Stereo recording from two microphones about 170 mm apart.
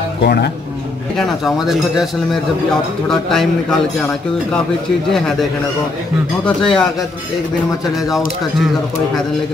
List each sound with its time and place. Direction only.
0.2 s a man's voice: 70° left (ahead or behind)
1.1 s a man's voice: centre (ahead or behind)
5.1 s a man's voice: centre (ahead or behind)